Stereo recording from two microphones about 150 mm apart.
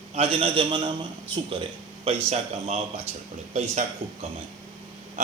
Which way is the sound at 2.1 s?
45° right (ahead or behind).